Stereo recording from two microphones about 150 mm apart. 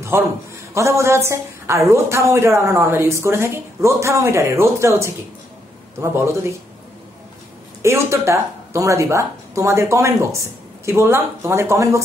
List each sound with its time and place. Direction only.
0.1 s a woman's voice: 15° right (ahead or behind)
7.8 s speech: 20° right (ahead or behind)